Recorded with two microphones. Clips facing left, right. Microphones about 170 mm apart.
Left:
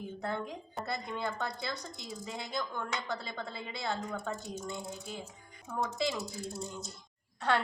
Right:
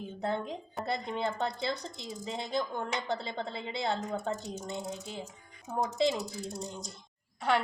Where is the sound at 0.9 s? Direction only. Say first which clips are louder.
Right 4 dB; 20° right (ahead or behind).